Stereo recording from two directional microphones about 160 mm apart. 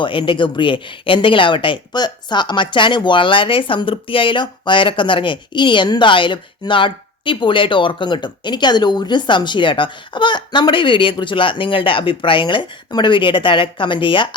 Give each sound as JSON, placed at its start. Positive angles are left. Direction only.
{"t": 0.0, "sound": "speech", "side_deg": 30}